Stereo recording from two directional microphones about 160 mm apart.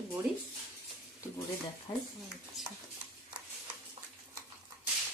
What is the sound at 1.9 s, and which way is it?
Speech, 25° left (ahead or behind).